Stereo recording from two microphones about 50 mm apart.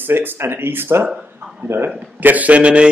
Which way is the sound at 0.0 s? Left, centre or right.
Right.